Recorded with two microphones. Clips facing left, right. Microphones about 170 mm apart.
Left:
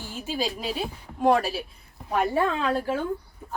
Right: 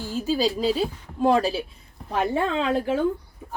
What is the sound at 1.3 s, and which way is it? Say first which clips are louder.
Speech: right 1 dB; 25° right (ahead or behind).